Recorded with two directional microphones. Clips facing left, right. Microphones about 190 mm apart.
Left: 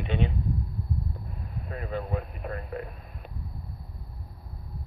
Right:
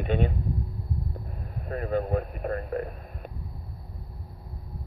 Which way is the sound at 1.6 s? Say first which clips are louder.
Right 6 dB; 45° right (ahead or behind).